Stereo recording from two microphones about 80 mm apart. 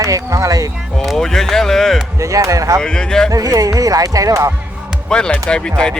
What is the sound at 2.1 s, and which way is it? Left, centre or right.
Speech, right.